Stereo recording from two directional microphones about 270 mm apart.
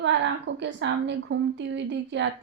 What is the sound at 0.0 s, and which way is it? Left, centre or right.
Speech, right.